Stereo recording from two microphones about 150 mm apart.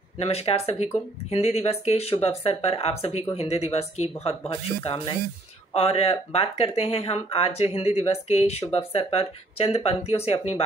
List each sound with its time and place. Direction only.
0.2 s speech: 45° left (ahead or behind)